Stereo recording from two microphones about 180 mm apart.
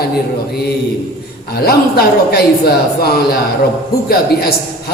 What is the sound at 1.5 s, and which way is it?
Speech, 60° left (ahead or behind).